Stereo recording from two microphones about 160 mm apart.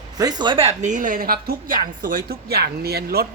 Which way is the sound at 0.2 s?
25° right (ahead or behind).